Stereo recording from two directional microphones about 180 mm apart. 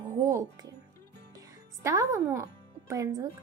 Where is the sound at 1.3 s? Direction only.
20° right (ahead or behind).